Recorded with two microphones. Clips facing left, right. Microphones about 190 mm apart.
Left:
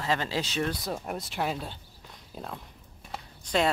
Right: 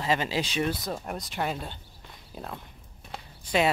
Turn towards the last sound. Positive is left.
turn(degrees=-5)  # may be behind; listen again after turning